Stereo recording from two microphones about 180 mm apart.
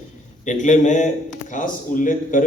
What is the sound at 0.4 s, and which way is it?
A man's voice, 45° left (ahead or behind).